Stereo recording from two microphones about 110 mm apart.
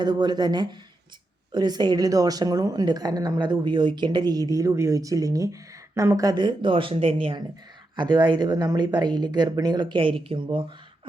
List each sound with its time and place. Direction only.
0.0 s a woman's voice: 40° right (ahead or behind)